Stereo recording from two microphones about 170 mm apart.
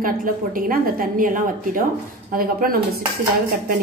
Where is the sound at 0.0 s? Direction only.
55° right (ahead or behind).